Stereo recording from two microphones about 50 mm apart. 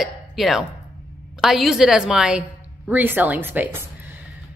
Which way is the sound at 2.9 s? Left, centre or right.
Right.